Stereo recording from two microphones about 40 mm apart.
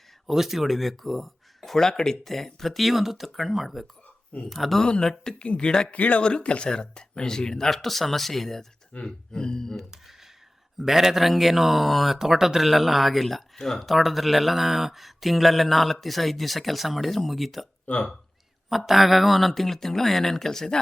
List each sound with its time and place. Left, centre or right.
0.3 s speech: centre
5.3 s speech: left
5.9 s speech: left; by 8.6 s centre
9.0 s speech: centre
10.8 s speech: centre
17.9 s speech: left
18.7 s speech: centre